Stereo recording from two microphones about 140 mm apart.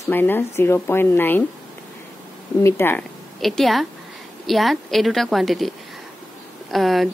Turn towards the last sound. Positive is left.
turn(degrees=0)  # may be behind; listen again after turning